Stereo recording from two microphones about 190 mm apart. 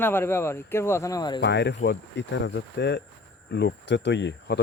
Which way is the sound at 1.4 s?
65° left (ahead or behind).